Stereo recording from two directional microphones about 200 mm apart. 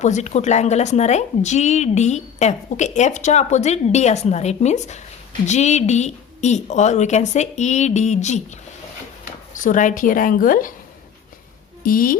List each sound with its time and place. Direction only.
0.0 s speech: 35° left (ahead or behind)
9.6 s a woman's voice: 40° left (ahead or behind)
11.8 s a woman's voice: 45° left (ahead or behind)